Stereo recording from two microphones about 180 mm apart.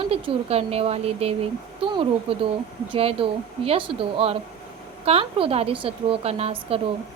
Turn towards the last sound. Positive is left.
turn(degrees=-35)  # may be behind; listen again after turning